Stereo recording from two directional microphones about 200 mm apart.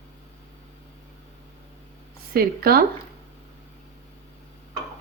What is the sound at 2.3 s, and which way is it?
Speech, 50° right (ahead or behind).